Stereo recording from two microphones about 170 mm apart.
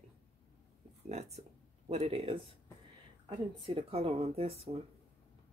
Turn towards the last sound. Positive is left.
turn(degrees=-35)  # may be behind; listen again after turning